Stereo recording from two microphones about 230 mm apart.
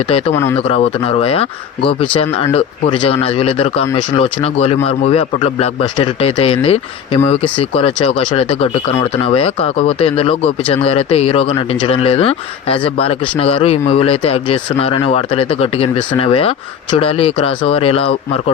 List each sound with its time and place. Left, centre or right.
0.3 s speech: centre
0.7 s speech: left